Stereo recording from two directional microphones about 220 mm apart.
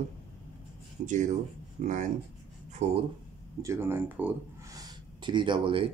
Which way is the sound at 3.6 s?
10° right (ahead or behind).